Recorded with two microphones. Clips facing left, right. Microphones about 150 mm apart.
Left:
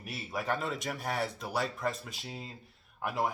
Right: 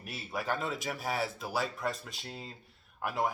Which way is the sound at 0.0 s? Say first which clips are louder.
Left 1 dB; centre (ahead or behind).